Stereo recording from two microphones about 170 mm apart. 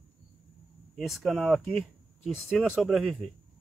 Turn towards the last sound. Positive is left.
turn(degrees=0)  # may be behind; listen again after turning